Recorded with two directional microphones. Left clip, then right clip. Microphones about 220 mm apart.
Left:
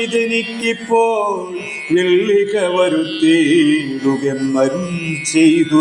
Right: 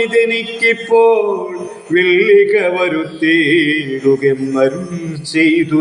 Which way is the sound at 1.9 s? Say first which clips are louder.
Right 4 dB; 40° left (ahead or behind).